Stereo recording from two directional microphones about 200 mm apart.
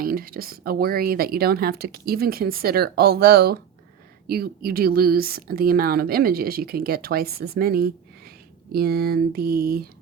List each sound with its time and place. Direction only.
0.0 s speech: 45° right (ahead or behind)